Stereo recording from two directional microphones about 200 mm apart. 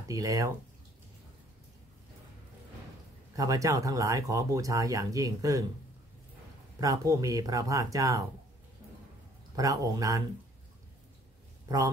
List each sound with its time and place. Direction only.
0.1 s speech: 15° right (ahead or behind)
3.3 s speech: 15° right (ahead or behind)
6.8 s speech: 15° right (ahead or behind)
9.6 s speech: 15° right (ahead or behind)